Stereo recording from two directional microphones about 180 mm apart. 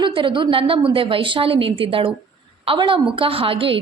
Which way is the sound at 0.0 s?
30° right (ahead or behind).